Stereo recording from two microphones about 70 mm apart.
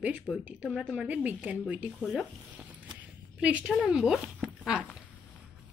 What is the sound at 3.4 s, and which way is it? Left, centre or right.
Speech, centre.